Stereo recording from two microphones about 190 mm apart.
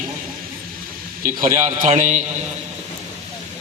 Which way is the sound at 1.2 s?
45° right (ahead or behind).